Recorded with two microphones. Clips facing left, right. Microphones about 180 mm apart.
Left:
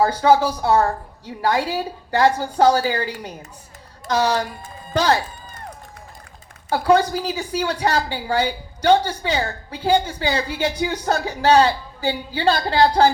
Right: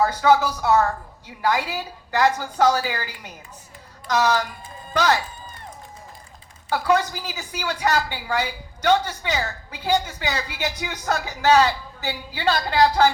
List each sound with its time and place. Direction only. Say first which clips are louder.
0.0 s speech: left 2 dB; 30° left (ahead or behind)
6.7 s speech: left 4 dB; 30° left (ahead or behind)